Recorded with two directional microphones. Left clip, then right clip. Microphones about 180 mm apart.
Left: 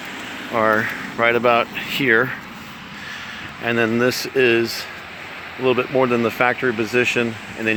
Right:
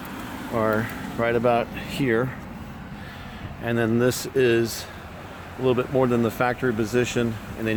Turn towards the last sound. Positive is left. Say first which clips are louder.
# left 5 dB
turn(degrees=20)  # may be behind; listen again after turning